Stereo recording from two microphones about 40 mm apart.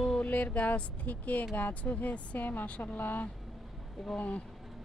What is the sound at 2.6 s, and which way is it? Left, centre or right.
Speech, left.